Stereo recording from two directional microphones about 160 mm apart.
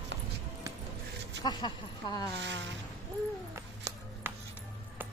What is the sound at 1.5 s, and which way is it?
Speech, 25° left (ahead or behind).